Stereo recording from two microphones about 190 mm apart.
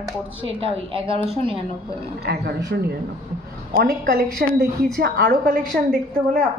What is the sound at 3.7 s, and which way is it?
A woman's voice, 55° right (ahead or behind).